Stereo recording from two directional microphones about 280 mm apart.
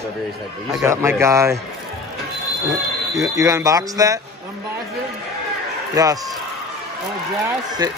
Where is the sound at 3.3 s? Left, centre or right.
Centre.